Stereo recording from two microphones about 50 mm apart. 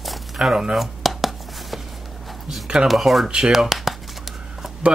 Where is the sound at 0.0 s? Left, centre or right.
Centre.